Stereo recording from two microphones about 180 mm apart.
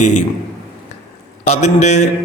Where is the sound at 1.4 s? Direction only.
40° left (ahead or behind).